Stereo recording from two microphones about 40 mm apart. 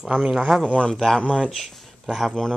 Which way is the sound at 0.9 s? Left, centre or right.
Centre.